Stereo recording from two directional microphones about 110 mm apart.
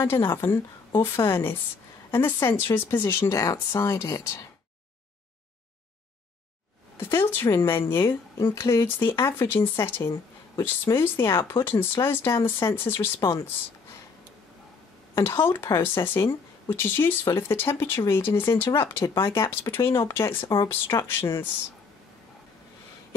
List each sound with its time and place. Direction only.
0.0 s speech: 20° left (ahead or behind)
7.0 s speech: 20° left (ahead or behind)
15.1 s speech: 20° left (ahead or behind)